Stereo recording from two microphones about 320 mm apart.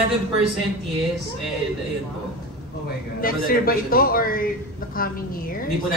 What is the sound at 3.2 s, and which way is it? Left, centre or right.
A man's voice, left.